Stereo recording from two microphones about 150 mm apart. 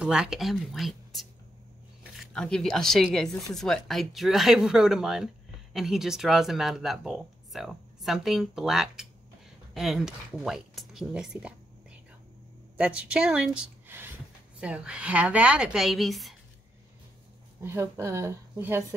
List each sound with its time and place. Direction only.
0.0 s speech: 5° right (ahead or behind)
12.7 s a woman's voice: 5° right (ahead or behind)
17.6 s a woman's voice: 15° right (ahead or behind)